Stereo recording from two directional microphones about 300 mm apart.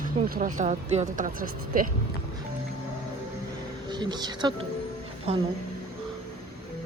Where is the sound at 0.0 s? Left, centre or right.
Right.